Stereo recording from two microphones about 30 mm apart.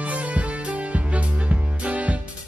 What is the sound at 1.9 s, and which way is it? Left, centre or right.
Music, right.